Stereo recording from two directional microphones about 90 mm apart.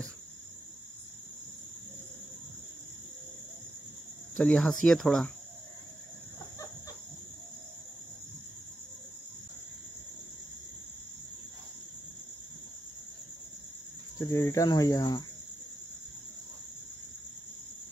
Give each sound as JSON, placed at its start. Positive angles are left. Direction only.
{"t": 4.4, "sound": "speech", "side_deg": 5}
{"t": 14.1, "sound": "cricket", "side_deg": 40}